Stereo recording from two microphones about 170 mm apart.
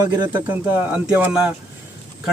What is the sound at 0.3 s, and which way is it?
Speech, 10° right (ahead or behind).